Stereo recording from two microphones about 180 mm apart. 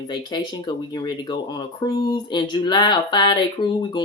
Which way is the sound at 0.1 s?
20° left (ahead or behind).